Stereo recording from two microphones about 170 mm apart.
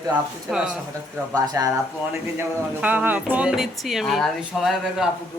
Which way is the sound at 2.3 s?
10° right (ahead or behind).